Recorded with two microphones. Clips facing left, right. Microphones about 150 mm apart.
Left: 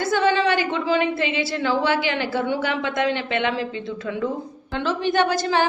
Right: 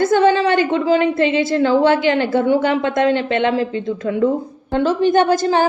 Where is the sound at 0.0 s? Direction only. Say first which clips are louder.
Right 6 dB; 50° right (ahead or behind).